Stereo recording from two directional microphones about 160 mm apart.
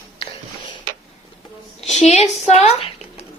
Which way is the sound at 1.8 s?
45° left (ahead or behind).